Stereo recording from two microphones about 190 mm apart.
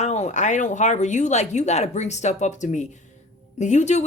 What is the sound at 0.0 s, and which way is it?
Speech, 35° left (ahead or behind).